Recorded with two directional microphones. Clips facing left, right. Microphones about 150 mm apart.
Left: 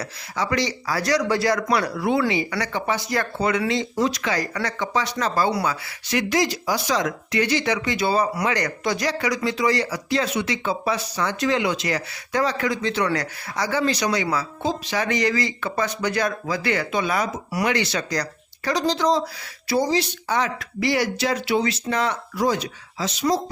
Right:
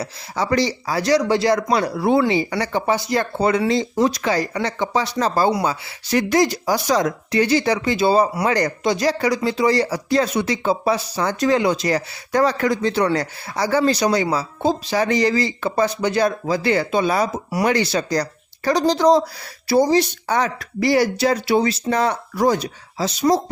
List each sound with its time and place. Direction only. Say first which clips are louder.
0.0 s speech: right 3 dB; 30° right (ahead or behind)